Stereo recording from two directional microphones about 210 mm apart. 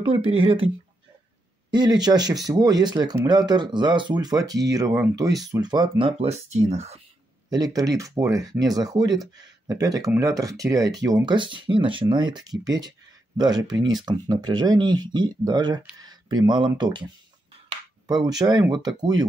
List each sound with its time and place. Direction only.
0.0 s speech: 25° right (ahead or behind)
1.7 s speech: 20° right (ahead or behind)
7.4 s speech: 20° right (ahead or behind)